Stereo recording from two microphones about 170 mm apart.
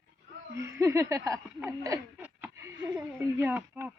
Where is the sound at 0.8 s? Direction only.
15° right (ahead or behind).